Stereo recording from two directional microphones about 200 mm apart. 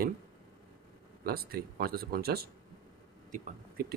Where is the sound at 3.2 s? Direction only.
40° right (ahead or behind).